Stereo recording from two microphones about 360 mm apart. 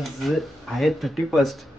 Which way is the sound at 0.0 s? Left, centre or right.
Centre.